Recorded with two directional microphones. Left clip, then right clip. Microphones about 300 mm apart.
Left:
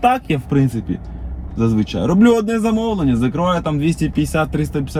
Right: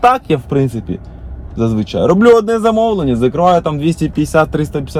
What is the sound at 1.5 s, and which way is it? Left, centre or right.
Speech, centre.